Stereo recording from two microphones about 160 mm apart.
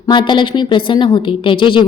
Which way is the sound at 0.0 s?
30° left (ahead or behind).